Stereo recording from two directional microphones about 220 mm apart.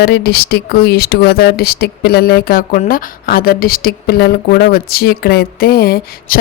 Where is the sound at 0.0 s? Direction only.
45° left (ahead or behind).